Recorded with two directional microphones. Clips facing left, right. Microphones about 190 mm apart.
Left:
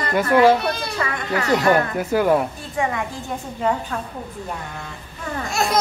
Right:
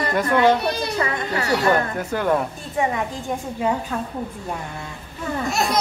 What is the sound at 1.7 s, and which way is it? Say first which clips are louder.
Speech: left 3 dB; 10° left (ahead or behind).